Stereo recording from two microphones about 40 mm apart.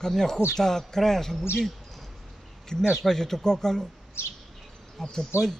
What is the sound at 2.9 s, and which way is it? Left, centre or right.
Speech, centre.